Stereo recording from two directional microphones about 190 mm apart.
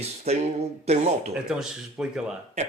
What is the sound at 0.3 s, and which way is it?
Speech, 35° right (ahead or behind).